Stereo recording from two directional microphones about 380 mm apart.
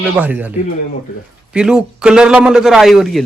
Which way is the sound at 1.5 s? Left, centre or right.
Centre.